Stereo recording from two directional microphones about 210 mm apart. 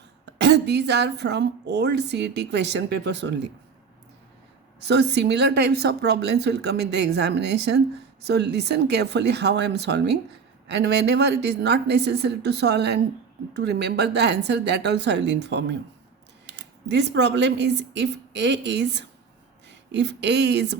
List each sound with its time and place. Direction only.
0.3 s a woman's voice: 55° right (ahead or behind)
4.8 s a woman's voice: 50° right (ahead or behind)